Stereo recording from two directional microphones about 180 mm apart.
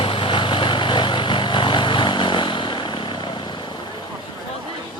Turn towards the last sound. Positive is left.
turn(degrees=25)  # may be behind; listen again after turning